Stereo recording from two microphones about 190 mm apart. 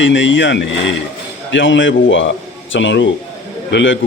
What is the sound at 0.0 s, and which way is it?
A man's voice, 75° left (ahead or behind).